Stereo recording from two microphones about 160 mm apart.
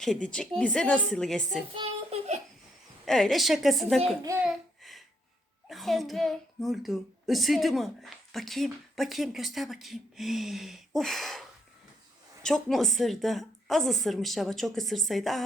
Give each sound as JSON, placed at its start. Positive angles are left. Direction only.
{"t": 0.0, "sound": "a child's voice", "side_deg": 5}
{"t": 1.7, "sound": "child singing", "side_deg": -35}
{"t": 3.1, "sound": "a child's voice", "side_deg": 0}
{"t": 4.4, "sound": "a sound", "side_deg": 0}
{"t": 5.6, "sound": "a child's voice", "side_deg": 0}